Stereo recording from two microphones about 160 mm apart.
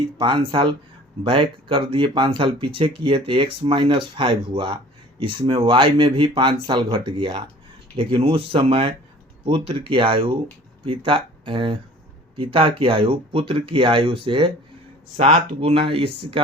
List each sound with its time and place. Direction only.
0.2 s speech: 30° right (ahead or behind)
15.1 s speech: 45° right (ahead or behind)